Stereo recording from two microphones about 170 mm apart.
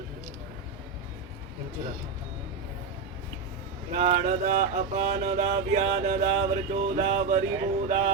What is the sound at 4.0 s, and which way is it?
Mantra, 45° right (ahead or behind).